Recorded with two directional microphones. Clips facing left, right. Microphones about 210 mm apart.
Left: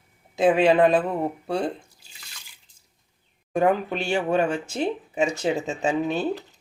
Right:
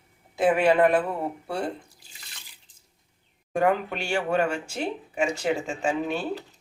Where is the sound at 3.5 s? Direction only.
20° left (ahead or behind).